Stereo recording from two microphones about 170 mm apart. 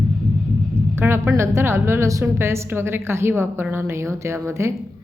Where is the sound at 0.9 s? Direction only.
15° right (ahead or behind).